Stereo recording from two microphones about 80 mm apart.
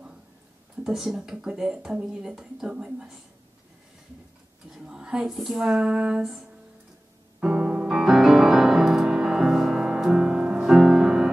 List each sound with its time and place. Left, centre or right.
0.8 s speech: centre
4.6 s a sound: centre
7.3 s music: centre